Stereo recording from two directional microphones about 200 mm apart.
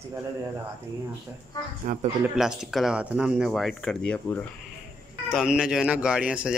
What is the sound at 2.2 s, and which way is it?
Speech, centre (ahead or behind).